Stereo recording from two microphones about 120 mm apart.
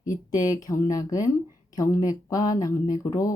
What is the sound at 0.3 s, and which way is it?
Speech, 30° left (ahead or behind).